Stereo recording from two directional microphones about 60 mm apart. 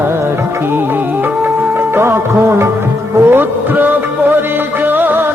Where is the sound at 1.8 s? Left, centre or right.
Right.